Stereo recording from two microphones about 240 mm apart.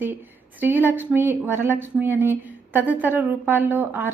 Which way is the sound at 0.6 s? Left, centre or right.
Centre.